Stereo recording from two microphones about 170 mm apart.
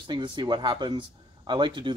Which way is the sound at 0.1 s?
25° right (ahead or behind).